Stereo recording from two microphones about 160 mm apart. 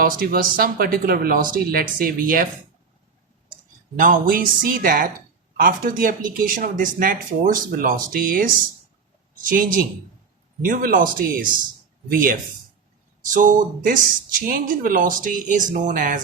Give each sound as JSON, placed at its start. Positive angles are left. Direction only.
{"t": 0.0, "sound": "speech", "side_deg": -65}
{"t": 3.9, "sound": "speech", "side_deg": -55}